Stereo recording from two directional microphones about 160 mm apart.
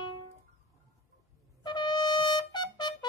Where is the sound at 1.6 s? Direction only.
30° left (ahead or behind).